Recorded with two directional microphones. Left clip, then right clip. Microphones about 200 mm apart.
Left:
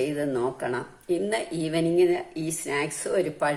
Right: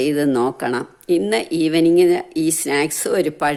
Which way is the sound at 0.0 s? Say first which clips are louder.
Right 9 dB; 50° right (ahead or behind).